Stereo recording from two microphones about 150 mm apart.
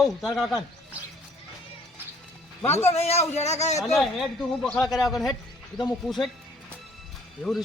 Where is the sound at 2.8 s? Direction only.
45° left (ahead or behind).